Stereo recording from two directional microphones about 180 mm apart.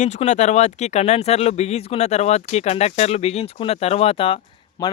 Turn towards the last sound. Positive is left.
turn(degrees=20)  # may be behind; listen again after turning